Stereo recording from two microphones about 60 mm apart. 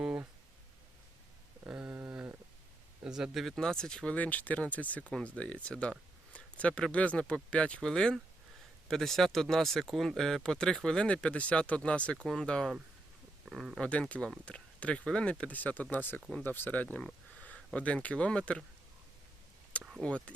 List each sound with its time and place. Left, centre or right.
1.6 s a sound: centre
3.0 s a sound: centre
3.3 s speech: centre
13.5 s speech: centre
13.7 s speech: centre
20.0 s speech: left